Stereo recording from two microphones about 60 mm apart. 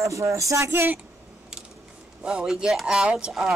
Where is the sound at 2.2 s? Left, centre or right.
Centre.